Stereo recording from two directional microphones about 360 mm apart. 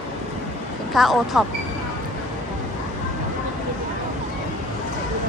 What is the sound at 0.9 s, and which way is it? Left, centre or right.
Speech, centre.